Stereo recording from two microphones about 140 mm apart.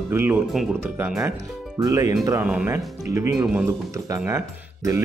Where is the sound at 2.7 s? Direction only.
20° right (ahead or behind).